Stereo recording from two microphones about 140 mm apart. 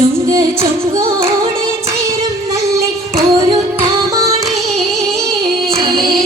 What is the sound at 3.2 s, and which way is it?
Music, 35° right (ahead or behind).